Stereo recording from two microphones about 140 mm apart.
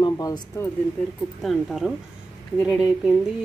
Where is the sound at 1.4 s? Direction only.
Centre (ahead or behind).